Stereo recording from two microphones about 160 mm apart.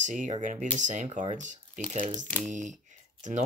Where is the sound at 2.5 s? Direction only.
50° right (ahead or behind).